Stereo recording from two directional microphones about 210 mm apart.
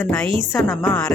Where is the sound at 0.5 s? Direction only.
10° left (ahead or behind).